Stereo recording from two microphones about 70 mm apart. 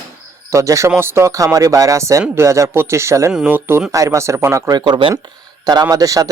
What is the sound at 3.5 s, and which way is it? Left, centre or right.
Speech, right.